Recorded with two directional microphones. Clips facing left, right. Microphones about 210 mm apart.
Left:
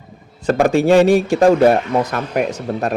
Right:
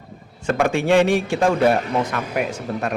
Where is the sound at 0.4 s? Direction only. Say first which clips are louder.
Left 5 dB; 35° left (ahead or behind).